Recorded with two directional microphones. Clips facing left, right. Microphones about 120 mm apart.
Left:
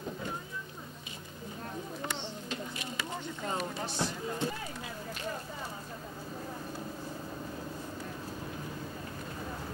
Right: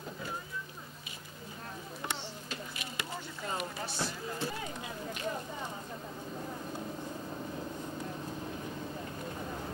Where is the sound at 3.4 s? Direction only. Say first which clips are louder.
Left 2 dB; 25° left (ahead or behind).